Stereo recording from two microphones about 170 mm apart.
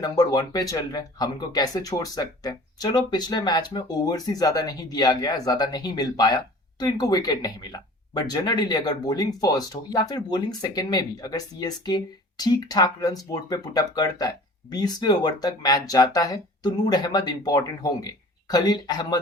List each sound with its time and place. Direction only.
0.0 s speech: 20° left (ahead or behind)